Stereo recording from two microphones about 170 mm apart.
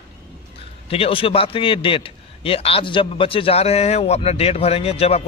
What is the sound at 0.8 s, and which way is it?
A man's voice, 35° left (ahead or behind).